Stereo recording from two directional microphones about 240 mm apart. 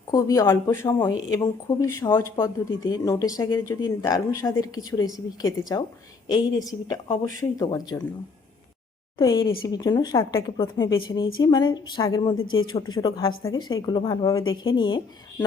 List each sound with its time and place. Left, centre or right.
0.1 s speech: centre
9.1 s a woman's voice: centre